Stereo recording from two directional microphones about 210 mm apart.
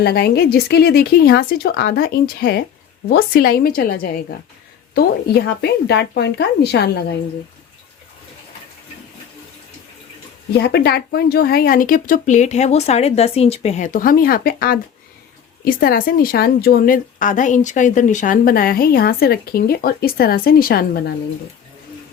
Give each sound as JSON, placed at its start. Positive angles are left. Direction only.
{"t": 0.0, "sound": "a woman's voice", "side_deg": 50}
{"t": 10.5, "sound": "a woman's voice", "side_deg": 50}